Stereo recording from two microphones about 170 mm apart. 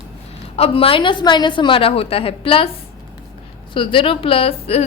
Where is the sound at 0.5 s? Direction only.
35° left (ahead or behind).